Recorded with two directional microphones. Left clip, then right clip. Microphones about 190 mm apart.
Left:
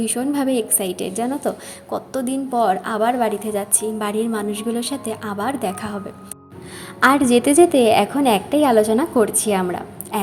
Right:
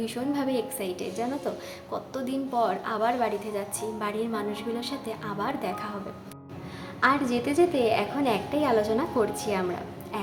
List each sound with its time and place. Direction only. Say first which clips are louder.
0.0 s a woman's voice: left 8 dB; 30° left (ahead or behind)
7.0 s a woman's voice: left 10 dB; 40° left (ahead or behind)